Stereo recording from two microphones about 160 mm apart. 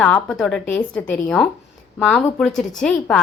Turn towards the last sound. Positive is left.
turn(degrees=5)  # may be behind; listen again after turning